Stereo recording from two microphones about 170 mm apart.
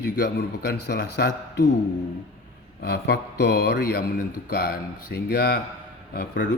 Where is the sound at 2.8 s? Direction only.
75° left (ahead or behind).